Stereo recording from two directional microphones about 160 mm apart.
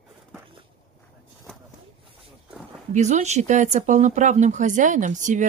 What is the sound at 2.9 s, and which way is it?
Speech, 45° right (ahead or behind).